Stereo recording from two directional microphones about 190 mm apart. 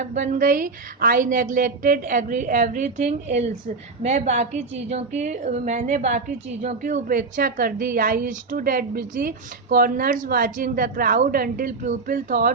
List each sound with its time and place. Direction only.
0.0 s a woman's voice: 40° right (ahead or behind)